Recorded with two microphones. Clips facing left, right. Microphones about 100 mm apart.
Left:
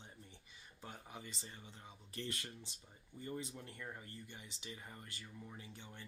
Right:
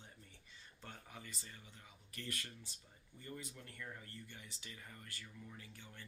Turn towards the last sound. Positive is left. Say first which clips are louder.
# left 3 dB
turn(degrees=20)  # may be behind; listen again after turning